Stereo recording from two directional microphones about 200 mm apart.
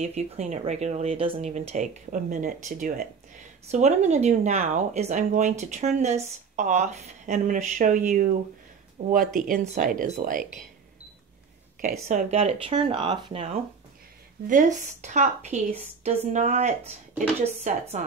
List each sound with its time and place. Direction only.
0.0 s speech: 35° right (ahead or behind)
3.7 s speech: 35° right (ahead or behind)
12.1 s speech: 35° right (ahead or behind)
14.5 s speech: 40° right (ahead or behind)